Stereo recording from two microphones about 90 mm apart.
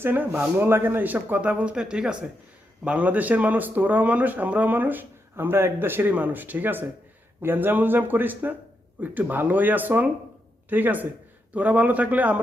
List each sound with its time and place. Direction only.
0.0 s a man's voice: 20° right (ahead or behind)